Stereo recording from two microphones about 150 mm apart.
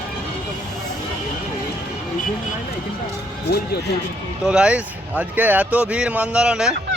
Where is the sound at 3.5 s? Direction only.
90° left.